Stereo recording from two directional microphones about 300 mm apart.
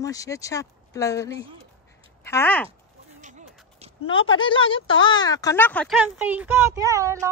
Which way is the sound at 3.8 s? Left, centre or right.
Right.